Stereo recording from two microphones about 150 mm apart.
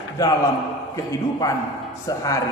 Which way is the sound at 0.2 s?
20° left (ahead or behind).